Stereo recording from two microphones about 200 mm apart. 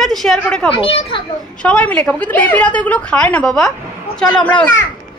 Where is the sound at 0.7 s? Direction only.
25° left (ahead or behind).